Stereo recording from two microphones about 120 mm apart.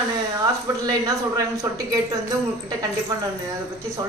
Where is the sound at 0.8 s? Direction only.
30° right (ahead or behind).